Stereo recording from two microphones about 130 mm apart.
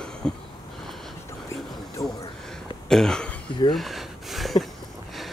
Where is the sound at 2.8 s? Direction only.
5° left (ahead or behind).